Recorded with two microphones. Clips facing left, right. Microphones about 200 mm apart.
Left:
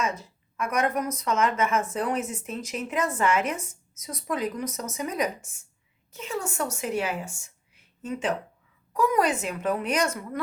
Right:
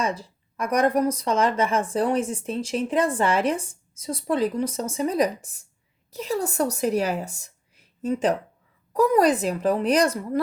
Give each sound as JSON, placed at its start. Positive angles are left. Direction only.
{"t": 0.0, "sound": "a woman's voice", "side_deg": -35}